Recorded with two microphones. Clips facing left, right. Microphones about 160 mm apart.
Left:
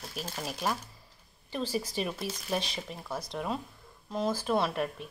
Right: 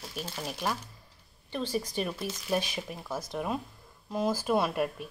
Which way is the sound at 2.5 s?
5° right (ahead or behind).